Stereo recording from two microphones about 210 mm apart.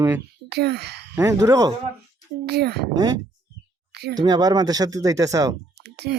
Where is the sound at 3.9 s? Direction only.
50° right (ahead or behind).